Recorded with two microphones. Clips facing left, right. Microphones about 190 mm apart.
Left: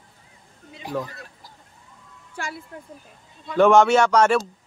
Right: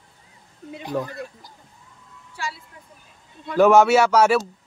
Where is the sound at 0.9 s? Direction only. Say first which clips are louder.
Right 2 dB; centre (ahead or behind).